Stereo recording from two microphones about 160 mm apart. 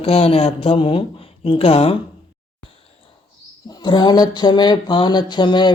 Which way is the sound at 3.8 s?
30° left (ahead or behind).